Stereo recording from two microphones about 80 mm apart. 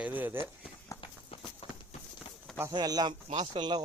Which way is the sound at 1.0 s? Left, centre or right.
Left.